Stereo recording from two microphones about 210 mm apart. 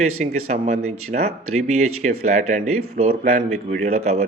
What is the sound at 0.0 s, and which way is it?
Speech, 30° right (ahead or behind).